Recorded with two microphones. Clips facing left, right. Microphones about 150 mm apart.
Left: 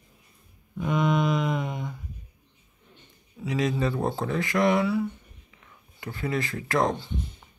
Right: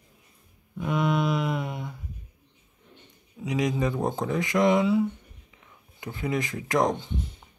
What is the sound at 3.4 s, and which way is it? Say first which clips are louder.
Speech: even; 15° right (ahead or behind).